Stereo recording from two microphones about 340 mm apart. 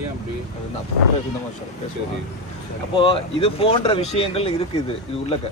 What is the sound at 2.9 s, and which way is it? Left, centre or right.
Speech, centre.